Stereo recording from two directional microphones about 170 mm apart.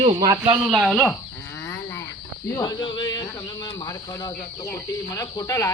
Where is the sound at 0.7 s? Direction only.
Centre (ahead or behind).